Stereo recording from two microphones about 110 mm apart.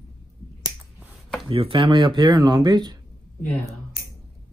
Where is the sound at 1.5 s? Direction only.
55° right (ahead or behind); by 3.0 s 40° right (ahead or behind).